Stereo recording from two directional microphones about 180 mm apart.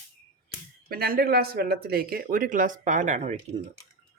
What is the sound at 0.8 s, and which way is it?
Speech, 55° right (ahead or behind).